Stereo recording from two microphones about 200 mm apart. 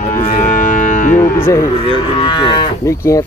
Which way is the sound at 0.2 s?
40° left (ahead or behind).